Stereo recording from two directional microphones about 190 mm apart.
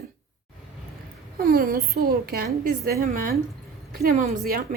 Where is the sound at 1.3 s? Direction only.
55° right (ahead or behind).